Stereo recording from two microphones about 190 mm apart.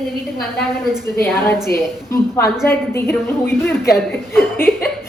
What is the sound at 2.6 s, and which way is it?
A woman's voice, 15° left (ahead or behind).